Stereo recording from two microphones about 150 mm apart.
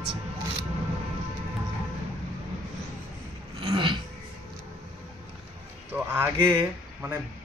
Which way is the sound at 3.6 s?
30° right (ahead or behind).